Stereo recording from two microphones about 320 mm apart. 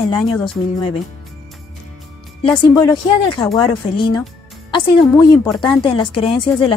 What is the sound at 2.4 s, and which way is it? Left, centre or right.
Speech, centre.